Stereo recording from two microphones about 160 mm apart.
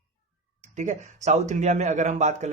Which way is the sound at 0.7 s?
50° right (ahead or behind).